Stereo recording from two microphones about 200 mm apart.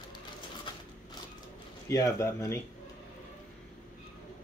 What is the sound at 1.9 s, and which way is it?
Speech, 15° left (ahead or behind).